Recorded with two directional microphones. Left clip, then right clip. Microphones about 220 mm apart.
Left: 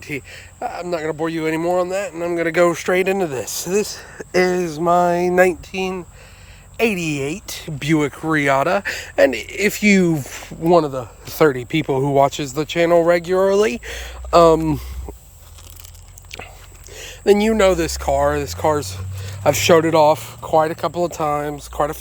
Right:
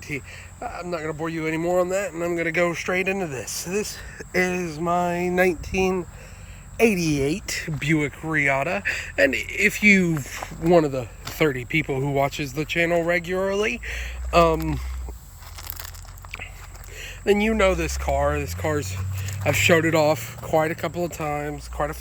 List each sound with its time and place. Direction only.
0.0 s speech: 20° left (ahead or behind)
7.1 s speech: 5° left (ahead or behind)
7.8 s speech: 15° left (ahead or behind)
11.3 s speech: 20° left (ahead or behind)
16.9 s speech: 25° left (ahead or behind)